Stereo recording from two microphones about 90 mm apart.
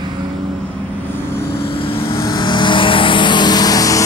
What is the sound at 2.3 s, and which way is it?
Vehicle, 55° left (ahead or behind).